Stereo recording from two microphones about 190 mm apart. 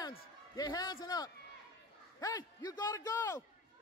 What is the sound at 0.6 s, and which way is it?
A man's voice, 20° left (ahead or behind).